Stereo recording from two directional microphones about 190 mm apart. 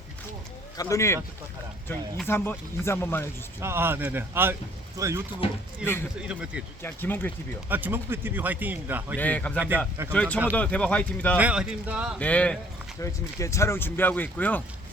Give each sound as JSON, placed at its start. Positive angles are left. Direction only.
{"t": 0.8, "sound": "speech", "side_deg": 15}
{"t": 3.6, "sound": "speech", "side_deg": -10}
{"t": 6.2, "sound": "speech", "side_deg": -5}
{"t": 6.8, "sound": "speech", "side_deg": 10}
{"t": 7.7, "sound": "speech", "side_deg": -10}
{"t": 9.1, "sound": "speech", "side_deg": 10}
{"t": 9.6, "sound": "speech", "side_deg": -10}
{"t": 10.1, "sound": "speech", "side_deg": 5}
{"t": 11.3, "sound": "speech", "side_deg": -5}
{"t": 12.2, "sound": "speech", "side_deg": 5}